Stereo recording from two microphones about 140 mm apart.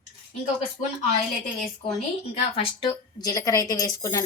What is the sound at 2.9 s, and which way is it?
A woman's voice, 25° left (ahead or behind).